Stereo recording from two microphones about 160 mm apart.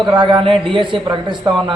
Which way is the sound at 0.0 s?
30° right (ahead or behind).